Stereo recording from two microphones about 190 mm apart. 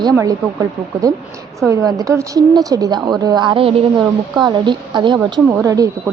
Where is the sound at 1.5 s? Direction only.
15° right (ahead or behind).